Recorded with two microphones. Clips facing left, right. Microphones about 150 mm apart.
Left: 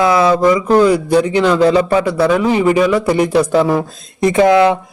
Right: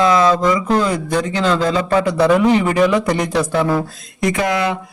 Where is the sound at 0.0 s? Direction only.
10° left (ahead or behind).